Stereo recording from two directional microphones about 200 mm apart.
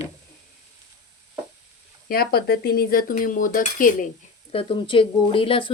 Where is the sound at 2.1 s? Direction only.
50° left (ahead or behind).